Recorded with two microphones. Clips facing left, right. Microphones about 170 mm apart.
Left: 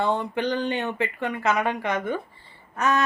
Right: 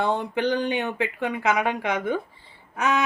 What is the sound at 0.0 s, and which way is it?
Speech, 15° right (ahead or behind).